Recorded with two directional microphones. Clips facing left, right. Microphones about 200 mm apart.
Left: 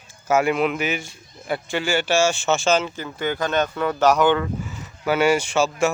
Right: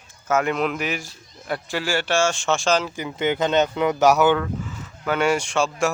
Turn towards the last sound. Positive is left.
turn(degrees=5)  # may be behind; listen again after turning